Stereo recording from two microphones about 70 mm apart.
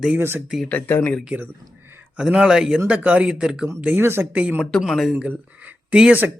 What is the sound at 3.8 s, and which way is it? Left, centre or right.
Speech, right.